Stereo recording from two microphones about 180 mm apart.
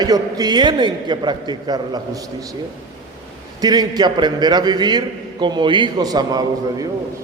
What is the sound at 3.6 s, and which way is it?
A man's voice, 20° right (ahead or behind).